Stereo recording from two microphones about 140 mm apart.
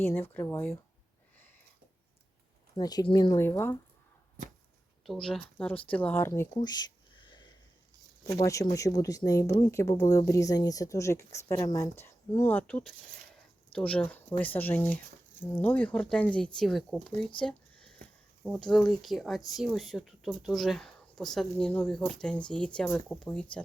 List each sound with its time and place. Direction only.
0.0 s speech: 15° left (ahead or behind)
2.7 s speech: 30° left (ahead or behind)
3.4 s speech: 15° left (ahead or behind)
5.0 s speech: 5° left (ahead or behind)
6.6 s a sound: 30° left (ahead or behind)
8.2 s speech: 25° left (ahead or behind); by 17.2 s 5° left (ahead or behind)
18.7 s speech: centre (ahead or behind)